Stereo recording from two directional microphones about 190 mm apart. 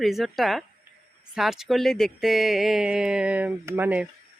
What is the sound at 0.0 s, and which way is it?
Speech, centre (ahead or behind).